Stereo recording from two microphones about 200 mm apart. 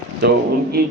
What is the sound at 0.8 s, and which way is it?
Speech, 45° right (ahead or behind).